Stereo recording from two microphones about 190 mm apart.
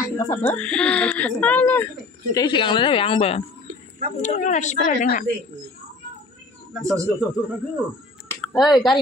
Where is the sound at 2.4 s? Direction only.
25° left (ahead or behind); by 5.2 s 45° left (ahead or behind).